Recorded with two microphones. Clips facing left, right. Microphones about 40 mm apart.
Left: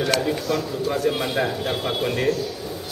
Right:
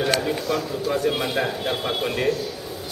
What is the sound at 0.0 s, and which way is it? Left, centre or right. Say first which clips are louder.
A man's voice: even; centre.